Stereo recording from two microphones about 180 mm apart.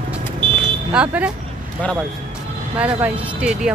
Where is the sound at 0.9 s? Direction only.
5° right (ahead or behind).